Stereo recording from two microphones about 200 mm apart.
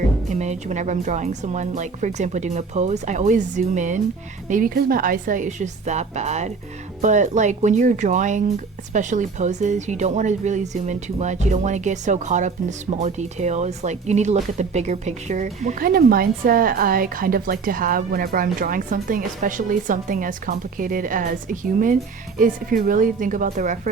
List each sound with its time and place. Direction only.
0.3 s speech: 35° right (ahead or behind)